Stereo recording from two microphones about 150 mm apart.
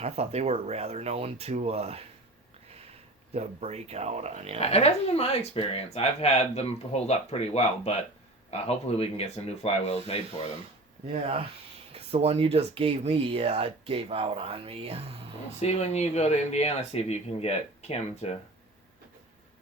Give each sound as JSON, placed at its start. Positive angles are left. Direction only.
{"t": 0.0, "sound": "speech", "side_deg": -45}
{"t": 3.3, "sound": "speech", "side_deg": -45}
{"t": 4.6, "sound": "speech", "side_deg": 45}
{"t": 11.0, "sound": "speech", "side_deg": -45}
{"t": 15.6, "sound": "speech", "side_deg": 45}